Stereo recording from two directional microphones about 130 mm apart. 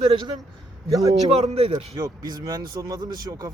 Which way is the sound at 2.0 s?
30° right (ahead or behind).